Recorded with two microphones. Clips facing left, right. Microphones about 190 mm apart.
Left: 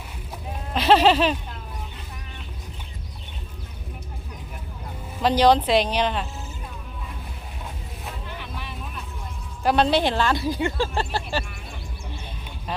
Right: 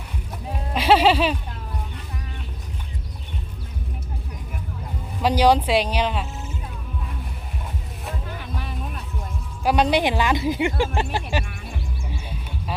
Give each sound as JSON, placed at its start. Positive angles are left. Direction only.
{"t": 0.7, "sound": "a sound", "side_deg": -10}
{"t": 5.2, "sound": "speech", "side_deg": -10}
{"t": 9.6, "sound": "speech", "side_deg": -10}
{"t": 12.0, "sound": "music", "side_deg": -5}